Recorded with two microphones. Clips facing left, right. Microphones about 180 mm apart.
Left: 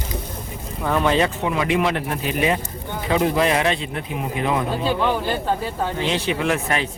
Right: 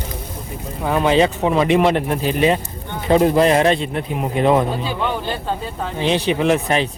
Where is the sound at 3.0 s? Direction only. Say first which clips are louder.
Right 5 dB; 40° right (ahead or behind).